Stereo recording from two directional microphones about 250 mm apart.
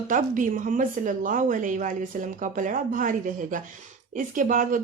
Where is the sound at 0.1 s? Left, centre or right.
Right.